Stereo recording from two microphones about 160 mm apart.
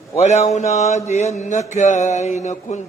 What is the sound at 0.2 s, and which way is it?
Mantra, 45° left (ahead or behind).